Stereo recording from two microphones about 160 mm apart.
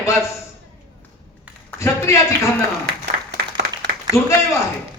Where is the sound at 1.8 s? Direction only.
20° left (ahead or behind).